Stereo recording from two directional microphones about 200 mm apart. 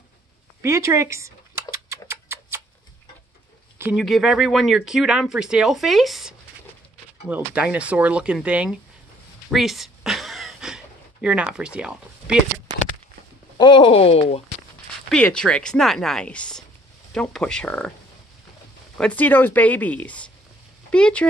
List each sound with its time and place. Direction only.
0.6 s speech: 15° right (ahead or behind)
1.9 s a sound: 15° right (ahead or behind)
3.9 s speech: centre (ahead or behind)
9.5 s a sound: centre (ahead or behind)
13.6 s speech: 25° left (ahead or behind)
15.0 s speech: 5° left (ahead or behind)
18.9 s speech: 5° left (ahead or behind)